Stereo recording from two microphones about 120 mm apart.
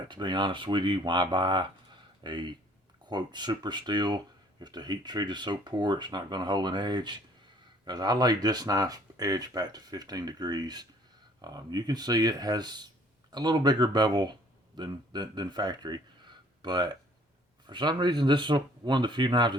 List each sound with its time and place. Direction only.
0.1 s speech: 40° right (ahead or behind)